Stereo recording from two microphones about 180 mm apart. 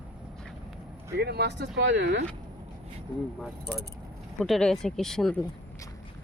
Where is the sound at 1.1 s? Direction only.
65° right (ahead or behind).